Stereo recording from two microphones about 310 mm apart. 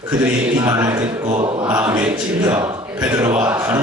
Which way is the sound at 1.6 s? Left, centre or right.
Centre.